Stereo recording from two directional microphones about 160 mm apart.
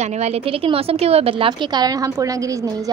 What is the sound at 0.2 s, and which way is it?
A woman's voice, 40° right (ahead or behind).